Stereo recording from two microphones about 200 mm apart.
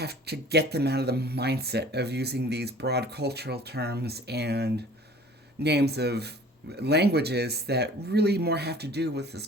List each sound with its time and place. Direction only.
0.0 s speech: 55° right (ahead or behind)